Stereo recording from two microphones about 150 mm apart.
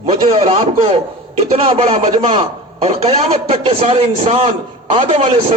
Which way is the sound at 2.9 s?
45° right (ahead or behind).